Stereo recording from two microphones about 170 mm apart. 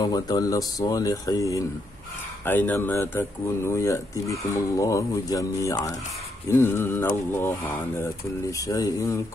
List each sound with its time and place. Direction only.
0.0 s speech: 20° left (ahead or behind)